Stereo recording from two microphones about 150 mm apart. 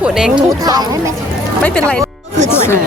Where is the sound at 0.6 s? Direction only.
25° right (ahead or behind).